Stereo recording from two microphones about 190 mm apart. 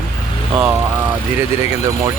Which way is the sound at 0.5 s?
5° right (ahead or behind).